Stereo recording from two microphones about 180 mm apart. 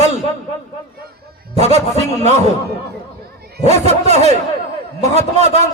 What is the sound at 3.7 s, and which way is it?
A man's voice, 35° right (ahead or behind).